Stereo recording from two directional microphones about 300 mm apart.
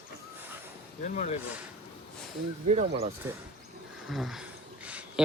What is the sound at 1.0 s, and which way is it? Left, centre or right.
Speech, left.